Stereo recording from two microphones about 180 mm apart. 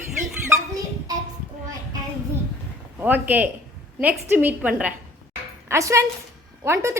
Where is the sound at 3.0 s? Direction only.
10° right (ahead or behind).